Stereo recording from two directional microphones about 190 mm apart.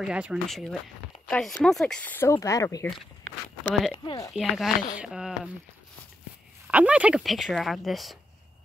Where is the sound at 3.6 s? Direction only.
5° right (ahead or behind).